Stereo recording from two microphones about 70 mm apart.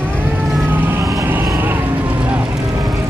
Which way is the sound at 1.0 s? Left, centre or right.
Right.